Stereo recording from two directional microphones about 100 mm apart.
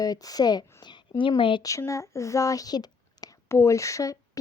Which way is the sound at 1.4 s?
55° left (ahead or behind).